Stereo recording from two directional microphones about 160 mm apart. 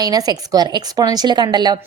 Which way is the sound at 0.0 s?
25° right (ahead or behind).